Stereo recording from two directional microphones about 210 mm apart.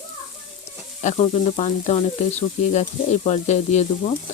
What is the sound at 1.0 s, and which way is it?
Sizzle, 30° left (ahead or behind).